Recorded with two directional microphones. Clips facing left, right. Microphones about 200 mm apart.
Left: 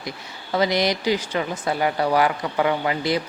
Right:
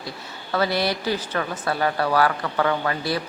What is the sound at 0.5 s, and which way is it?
Speech, 15° left (ahead or behind).